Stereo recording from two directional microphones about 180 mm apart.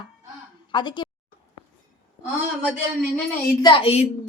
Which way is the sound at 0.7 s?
25° left (ahead or behind).